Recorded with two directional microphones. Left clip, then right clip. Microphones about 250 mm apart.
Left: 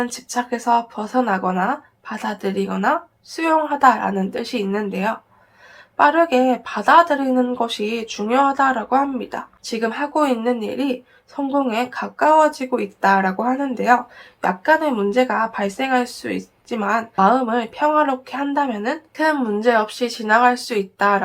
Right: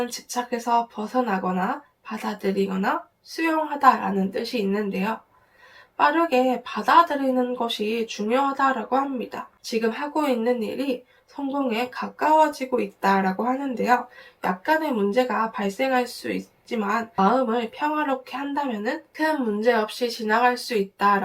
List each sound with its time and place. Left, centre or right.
0.0 s speech: centre